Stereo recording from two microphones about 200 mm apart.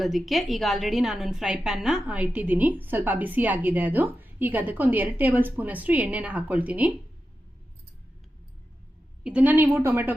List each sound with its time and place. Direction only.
0.0 s a woman's voice: centre (ahead or behind)
9.2 s a woman's voice: 10° right (ahead or behind)